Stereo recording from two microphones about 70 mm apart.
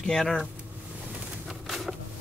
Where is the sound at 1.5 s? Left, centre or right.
Centre.